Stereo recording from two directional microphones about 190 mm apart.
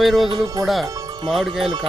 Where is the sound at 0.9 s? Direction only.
20° right (ahead or behind).